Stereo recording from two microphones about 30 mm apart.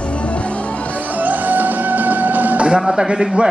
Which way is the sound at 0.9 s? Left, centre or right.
Right.